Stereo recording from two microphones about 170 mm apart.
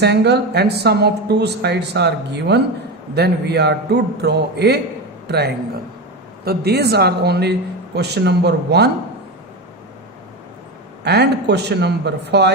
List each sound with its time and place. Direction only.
0.0 s speech: 80° right
11.0 s speech: 75° right (ahead or behind)